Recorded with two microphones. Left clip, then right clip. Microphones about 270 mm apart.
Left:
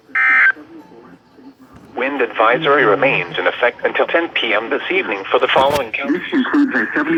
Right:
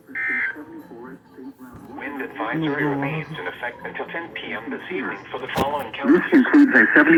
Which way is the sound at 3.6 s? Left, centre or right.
Left.